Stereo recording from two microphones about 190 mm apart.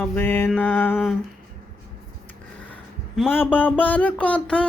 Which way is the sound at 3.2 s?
10° left (ahead or behind).